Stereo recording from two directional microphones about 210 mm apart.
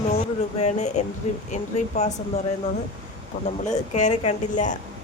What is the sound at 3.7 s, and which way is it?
A woman's voice, 35° left (ahead or behind).